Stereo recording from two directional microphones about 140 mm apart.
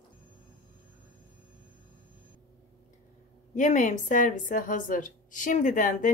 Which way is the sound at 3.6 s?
60° left (ahead or behind).